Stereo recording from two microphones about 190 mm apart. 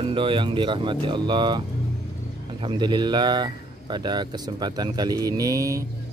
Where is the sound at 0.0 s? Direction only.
25° right (ahead or behind).